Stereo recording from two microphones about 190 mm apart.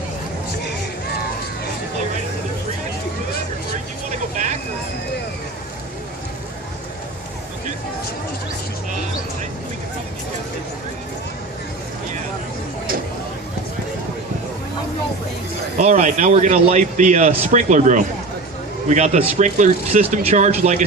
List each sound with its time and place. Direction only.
15.8 s a man's voice: 40° right (ahead or behind)